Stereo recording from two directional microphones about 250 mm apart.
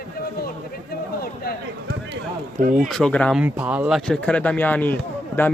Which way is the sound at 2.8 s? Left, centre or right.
Centre.